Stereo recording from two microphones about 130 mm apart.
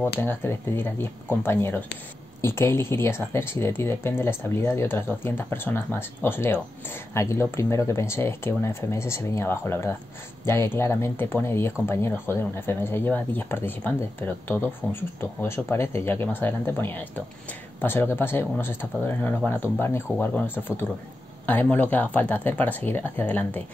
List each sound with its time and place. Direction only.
0.0 s speech: 15° left (ahead or behind)